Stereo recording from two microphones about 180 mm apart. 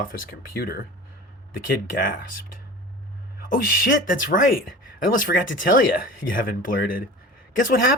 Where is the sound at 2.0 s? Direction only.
55° left (ahead or behind).